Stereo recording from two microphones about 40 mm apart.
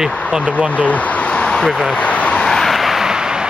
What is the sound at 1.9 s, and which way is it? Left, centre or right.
Vehicle, left.